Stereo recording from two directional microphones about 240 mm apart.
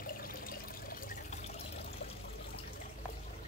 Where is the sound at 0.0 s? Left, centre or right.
Left.